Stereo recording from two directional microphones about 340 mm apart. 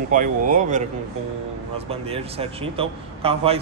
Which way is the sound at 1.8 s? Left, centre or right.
Centre.